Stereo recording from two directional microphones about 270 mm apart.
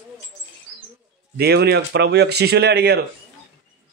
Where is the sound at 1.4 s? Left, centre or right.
Right.